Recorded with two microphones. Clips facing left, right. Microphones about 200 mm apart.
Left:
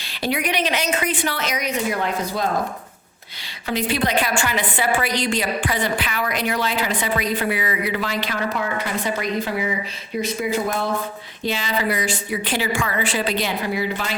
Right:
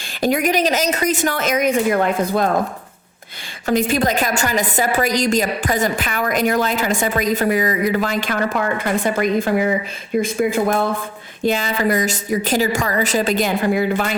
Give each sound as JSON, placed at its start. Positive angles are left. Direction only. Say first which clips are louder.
{"t": 0.2, "sound": "a woman's voice", "louder": "right 6 dB", "side_deg": -45}
{"t": 3.7, "sound": "a woman's voice", "louder": "right 5 dB", "side_deg": -45}